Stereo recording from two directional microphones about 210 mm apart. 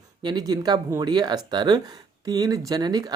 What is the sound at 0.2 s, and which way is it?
Speech, 20° right (ahead or behind).